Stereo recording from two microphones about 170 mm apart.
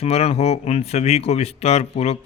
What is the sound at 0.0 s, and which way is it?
A man's voice, 35° left (ahead or behind).